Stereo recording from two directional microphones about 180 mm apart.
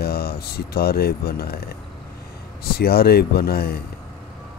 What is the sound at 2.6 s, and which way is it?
Speech, 60° left (ahead or behind).